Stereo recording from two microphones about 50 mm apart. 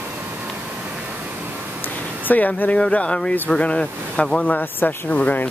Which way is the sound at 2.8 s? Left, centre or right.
Left.